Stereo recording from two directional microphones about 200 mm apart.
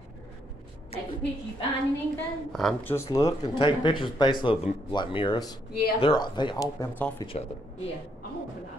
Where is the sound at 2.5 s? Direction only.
5° left (ahead or behind).